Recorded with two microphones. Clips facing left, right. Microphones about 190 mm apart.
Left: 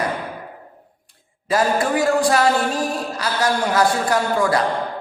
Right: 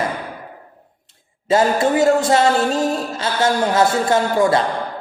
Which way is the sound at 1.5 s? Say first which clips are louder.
Right 3 dB; 25° right (ahead or behind).